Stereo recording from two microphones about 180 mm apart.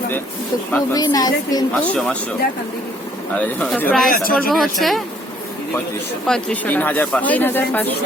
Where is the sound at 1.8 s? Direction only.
5° left (ahead or behind).